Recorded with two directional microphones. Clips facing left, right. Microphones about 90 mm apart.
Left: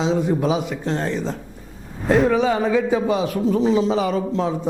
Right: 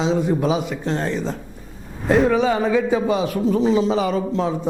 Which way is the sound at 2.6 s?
20° right (ahead or behind).